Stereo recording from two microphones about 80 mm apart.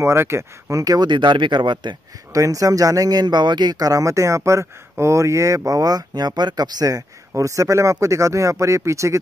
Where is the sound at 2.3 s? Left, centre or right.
Right.